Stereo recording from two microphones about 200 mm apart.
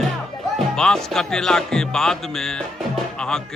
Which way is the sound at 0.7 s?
5° left (ahead or behind).